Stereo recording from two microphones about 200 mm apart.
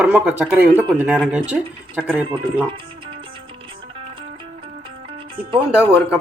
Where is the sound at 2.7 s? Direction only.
25° right (ahead or behind).